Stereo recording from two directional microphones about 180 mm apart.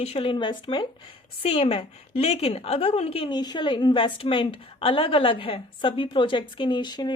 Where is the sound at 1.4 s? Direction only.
35° left (ahead or behind).